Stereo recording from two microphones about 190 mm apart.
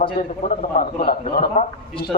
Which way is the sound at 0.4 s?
50° left (ahead or behind).